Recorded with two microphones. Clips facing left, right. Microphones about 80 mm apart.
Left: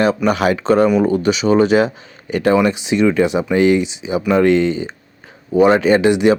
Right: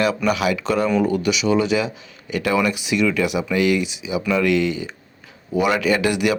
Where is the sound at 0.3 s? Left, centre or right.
Left.